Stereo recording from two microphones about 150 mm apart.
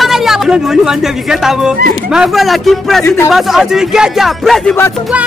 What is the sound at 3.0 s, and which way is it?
Speech, 15° left (ahead or behind).